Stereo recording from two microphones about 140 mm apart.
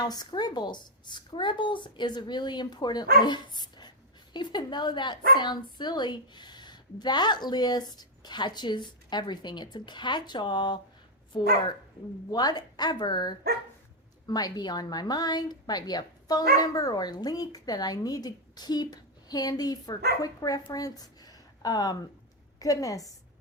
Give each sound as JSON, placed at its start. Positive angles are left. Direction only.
{"t": 0.0, "sound": "speech", "side_deg": 30}
{"t": 12.3, "sound": "speech", "side_deg": 30}
{"t": 20.7, "sound": "a sound", "side_deg": 25}
{"t": 22.6, "sound": "speech", "side_deg": 25}